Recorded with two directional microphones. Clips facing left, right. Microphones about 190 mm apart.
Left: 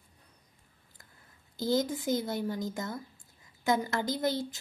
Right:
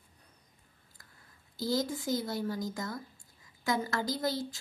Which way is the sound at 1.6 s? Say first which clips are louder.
Left 3 dB; 20° left (ahead or behind).